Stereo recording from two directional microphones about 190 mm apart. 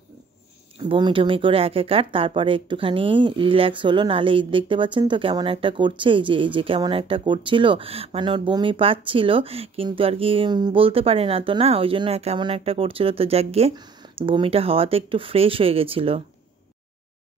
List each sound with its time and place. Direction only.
0.7 s speech: 25° right (ahead or behind)
13.7 s speech: 20° right (ahead or behind)